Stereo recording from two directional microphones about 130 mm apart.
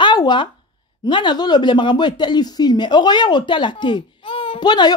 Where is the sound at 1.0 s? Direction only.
35° left (ahead or behind).